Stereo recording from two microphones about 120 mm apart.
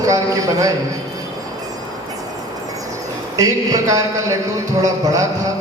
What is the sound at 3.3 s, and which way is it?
A man's voice, 30° right (ahead or behind).